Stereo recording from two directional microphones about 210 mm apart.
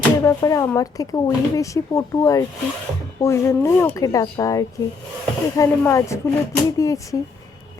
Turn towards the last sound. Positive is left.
turn(degrees=15)  # may be behind; listen again after turning